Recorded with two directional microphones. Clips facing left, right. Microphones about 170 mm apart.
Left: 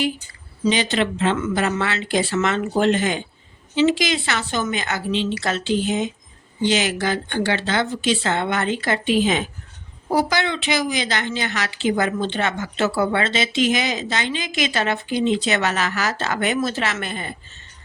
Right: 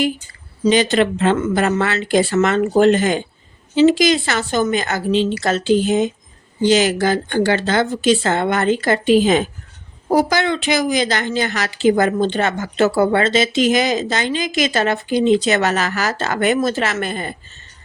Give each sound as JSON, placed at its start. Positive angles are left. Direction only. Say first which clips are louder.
{"t": 0.6, "sound": "a woman's voice", "louder": "right 5 dB", "side_deg": -45}